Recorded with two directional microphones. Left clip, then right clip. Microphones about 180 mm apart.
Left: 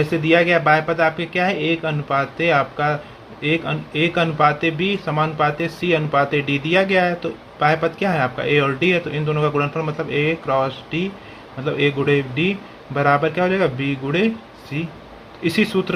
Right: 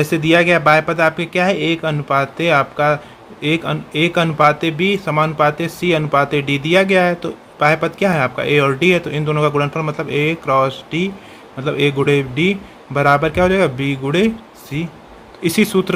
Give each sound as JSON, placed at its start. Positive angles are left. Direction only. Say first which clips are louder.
{"t": 0.1, "sound": "speech", "louder": "right 3 dB", "side_deg": -35}
{"t": 15.4, "sound": "speech", "louder": "right 3 dB", "side_deg": -35}